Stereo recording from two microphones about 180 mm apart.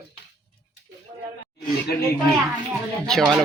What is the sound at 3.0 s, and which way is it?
Speech, centre (ahead or behind).